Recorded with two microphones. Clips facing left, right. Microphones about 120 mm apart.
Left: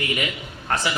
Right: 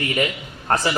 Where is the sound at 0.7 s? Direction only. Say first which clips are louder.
Right 4 dB; 35° right (ahead or behind).